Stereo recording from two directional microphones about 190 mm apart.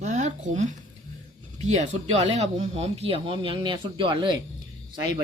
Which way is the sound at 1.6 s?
40° right (ahead or behind).